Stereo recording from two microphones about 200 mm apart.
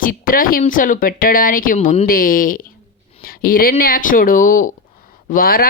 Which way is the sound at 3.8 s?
45° left (ahead or behind).